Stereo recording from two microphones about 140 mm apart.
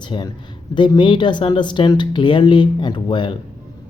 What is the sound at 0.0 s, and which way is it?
Speech, 30° left (ahead or behind).